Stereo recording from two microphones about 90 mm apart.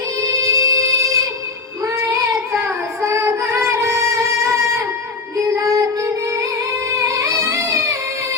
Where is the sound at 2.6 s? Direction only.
25° right (ahead or behind).